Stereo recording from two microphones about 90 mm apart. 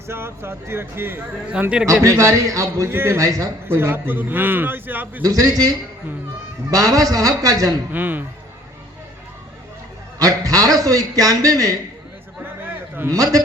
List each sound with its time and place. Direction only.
0.1 s a man's voice: 25° right (ahead or behind)
1.9 s speech: 35° right (ahead or behind)
2.9 s a man's voice: 25° right (ahead or behind)
3.2 s speech: 40° right (ahead or behind)
3.7 s a man's voice: 25° right (ahead or behind)
5.2 s speech: 40° right (ahead or behind)
7.9 s a man's voice: 20° right (ahead or behind)
10.2 s a man's voice: 40° right (ahead or behind)
13.1 s speech: 40° right (ahead or behind)